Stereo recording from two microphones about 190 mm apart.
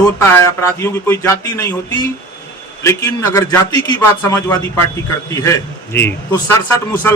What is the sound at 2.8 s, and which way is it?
A man's voice, 20° left (ahead or behind).